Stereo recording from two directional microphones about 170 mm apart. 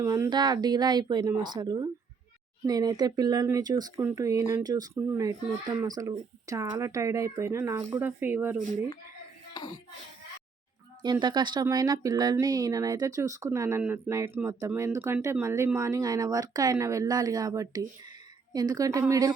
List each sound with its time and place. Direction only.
0.0 s speech: 20° right (ahead or behind)
11.0 s speech: 25° right (ahead or behind)